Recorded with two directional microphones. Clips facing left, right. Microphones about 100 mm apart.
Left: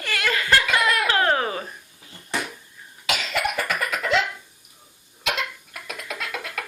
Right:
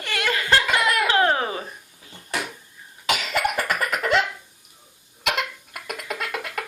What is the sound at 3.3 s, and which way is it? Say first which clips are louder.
Baby laughter: right 1 dB; 50° right (ahead or behind).